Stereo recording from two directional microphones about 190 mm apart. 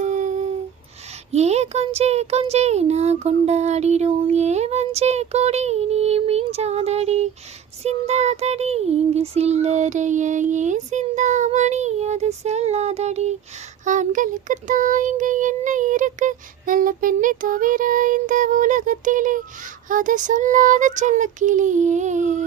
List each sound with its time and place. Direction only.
0.0 s a sound: 40° right (ahead or behind)
1.3 s speech: 35° right (ahead or behind)
13.8 s child singing: 40° right (ahead or behind)
19.9 s speech: 45° right (ahead or behind)